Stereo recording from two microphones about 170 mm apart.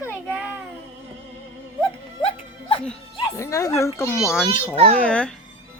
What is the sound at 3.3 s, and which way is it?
Speech, 20° left (ahead or behind).